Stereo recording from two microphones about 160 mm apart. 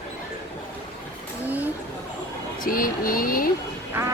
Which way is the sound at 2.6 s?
60° left (ahead or behind).